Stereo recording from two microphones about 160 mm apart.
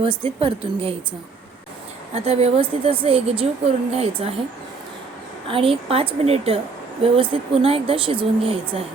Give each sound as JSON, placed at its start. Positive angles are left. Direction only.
{"t": 0.0, "sound": "speech", "side_deg": -35}
{"t": 2.1, "sound": "speech", "side_deg": -40}
{"t": 5.5, "sound": "speech", "side_deg": -35}